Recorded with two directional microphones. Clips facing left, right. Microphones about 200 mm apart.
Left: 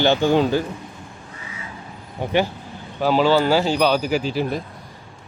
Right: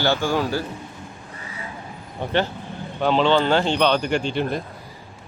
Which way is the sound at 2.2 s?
10° left (ahead or behind).